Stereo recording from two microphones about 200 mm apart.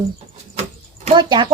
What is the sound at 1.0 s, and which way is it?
Speech, 20° right (ahead or behind).